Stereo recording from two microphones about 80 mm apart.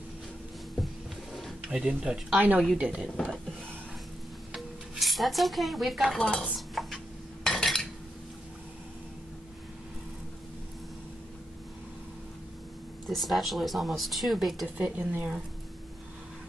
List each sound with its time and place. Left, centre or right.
1.7 s speech: centre
4.5 s speech: centre
6.5 s dishes: centre
7.4 s cutlery: centre
13.0 s speech: centre
14.8 s speech: centre